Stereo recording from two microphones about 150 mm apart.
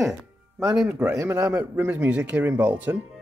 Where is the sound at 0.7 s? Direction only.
5° right (ahead or behind).